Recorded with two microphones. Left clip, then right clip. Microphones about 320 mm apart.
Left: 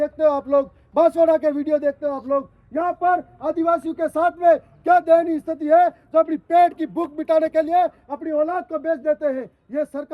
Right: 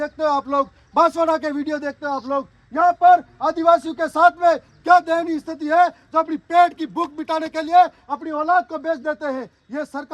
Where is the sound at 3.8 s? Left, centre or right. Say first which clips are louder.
Right 5 dB; centre.